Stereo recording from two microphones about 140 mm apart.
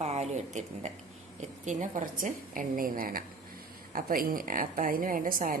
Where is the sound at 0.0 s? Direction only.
50° right (ahead or behind).